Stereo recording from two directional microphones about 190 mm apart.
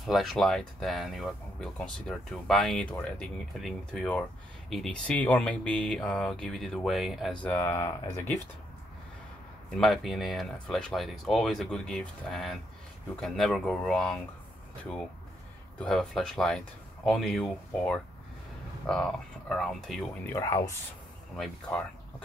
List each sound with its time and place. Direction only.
0.0 s speech: centre (ahead or behind)
7.4 s speech: 10° left (ahead or behind)
9.8 s speech: centre (ahead or behind)
15.8 s speech: 5° left (ahead or behind)
20.2 s speech: 15° left (ahead or behind)
21.4 s speech: 5° left (ahead or behind)